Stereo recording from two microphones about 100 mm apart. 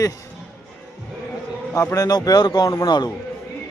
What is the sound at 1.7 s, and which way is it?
A man's voice, 30° left (ahead or behind).